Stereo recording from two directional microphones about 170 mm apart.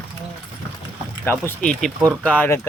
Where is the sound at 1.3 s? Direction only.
10° left (ahead or behind).